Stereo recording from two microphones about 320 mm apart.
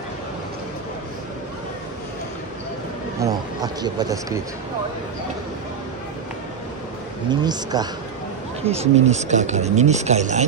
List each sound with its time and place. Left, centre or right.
3.2 s speech: centre
7.2 s speech: centre